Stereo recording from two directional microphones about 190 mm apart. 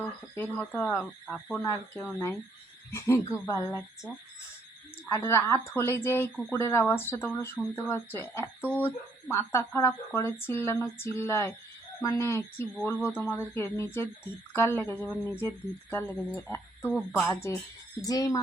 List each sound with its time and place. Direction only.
0.3 s speech: 10° left (ahead or behind)
5.0 s speech: 15° left (ahead or behind)
17.2 s speech: 15° left (ahead or behind)